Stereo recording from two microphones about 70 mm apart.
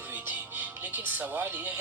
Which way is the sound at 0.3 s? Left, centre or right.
Right.